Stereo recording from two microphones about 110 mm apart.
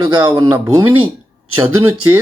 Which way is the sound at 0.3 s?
30° right (ahead or behind).